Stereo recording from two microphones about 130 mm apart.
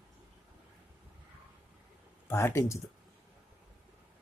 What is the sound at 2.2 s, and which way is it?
Speech, 20° left (ahead or behind).